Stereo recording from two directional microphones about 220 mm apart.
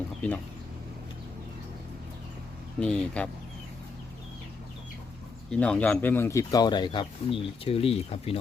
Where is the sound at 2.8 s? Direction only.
5° left (ahead or behind).